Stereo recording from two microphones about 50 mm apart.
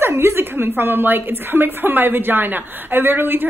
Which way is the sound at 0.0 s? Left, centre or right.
Right.